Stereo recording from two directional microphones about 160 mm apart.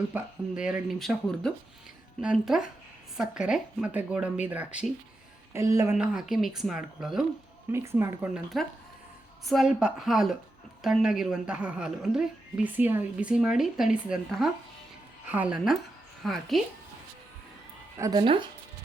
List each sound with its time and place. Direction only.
0.1 s a woman's voice: 5° right (ahead or behind)
5.5 s speech: 20° right (ahead or behind)
6.0 s a woman's voice: centre (ahead or behind)
7.7 s speech: 15° right (ahead or behind)
8.5 s a woman's voice: centre (ahead or behind)
17.9 s speech: 25° right (ahead or behind)